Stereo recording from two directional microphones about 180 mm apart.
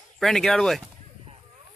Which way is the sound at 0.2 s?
Centre (ahead or behind).